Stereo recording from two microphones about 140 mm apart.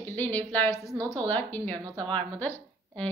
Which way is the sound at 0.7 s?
20° right (ahead or behind).